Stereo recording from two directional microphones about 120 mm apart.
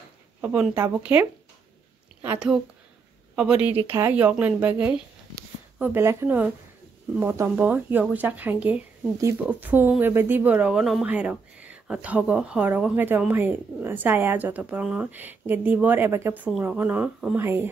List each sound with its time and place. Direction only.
0.4 s speech: 15° right (ahead or behind)
2.3 s speech: 5° right (ahead or behind)
17.4 s speech: 20° right (ahead or behind)